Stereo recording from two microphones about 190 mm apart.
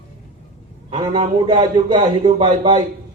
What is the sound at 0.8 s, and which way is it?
A man's voice, 30° right (ahead or behind).